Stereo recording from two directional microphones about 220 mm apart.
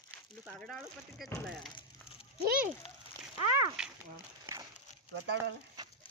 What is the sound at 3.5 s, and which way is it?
Speech, 5° right (ahead or behind).